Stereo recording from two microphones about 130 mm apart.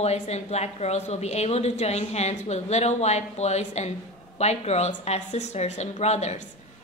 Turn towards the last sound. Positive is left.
turn(degrees=60)  # may be behind; listen again after turning